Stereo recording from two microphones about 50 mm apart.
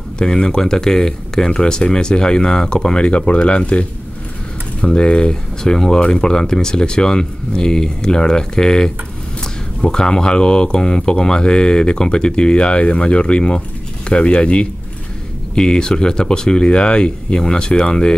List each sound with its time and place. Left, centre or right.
0.2 s speech: centre
4.8 s speech: left